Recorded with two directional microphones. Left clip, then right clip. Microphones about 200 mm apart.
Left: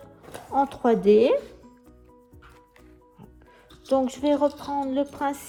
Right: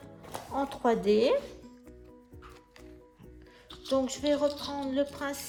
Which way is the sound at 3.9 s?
35° left (ahead or behind).